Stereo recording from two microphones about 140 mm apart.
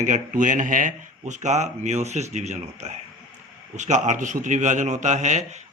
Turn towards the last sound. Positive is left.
turn(degrees=-55)  # may be behind; listen again after turning